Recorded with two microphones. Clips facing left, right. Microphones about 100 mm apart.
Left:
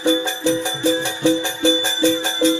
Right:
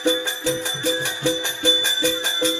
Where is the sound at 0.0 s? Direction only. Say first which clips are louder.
Left 4 dB; 20° left (ahead or behind).